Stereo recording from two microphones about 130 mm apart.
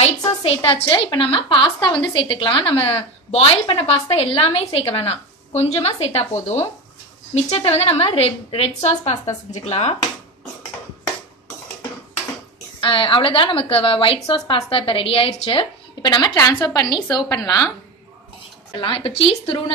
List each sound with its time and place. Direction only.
0.4 s a woman's voice: 45° left (ahead or behind)
12.8 s a woman's voice: 40° left (ahead or behind)
18.8 s a woman's voice: 45° left (ahead or behind)